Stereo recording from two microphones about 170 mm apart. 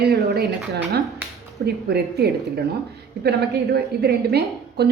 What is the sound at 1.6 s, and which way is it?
A woman's voice, 70° right (ahead or behind).